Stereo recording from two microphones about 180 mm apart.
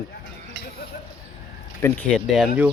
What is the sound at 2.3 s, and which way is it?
Speech, 5° right (ahead or behind).